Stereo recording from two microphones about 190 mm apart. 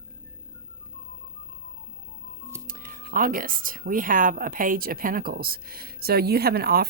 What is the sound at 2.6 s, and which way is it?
Speech, 45° right (ahead or behind).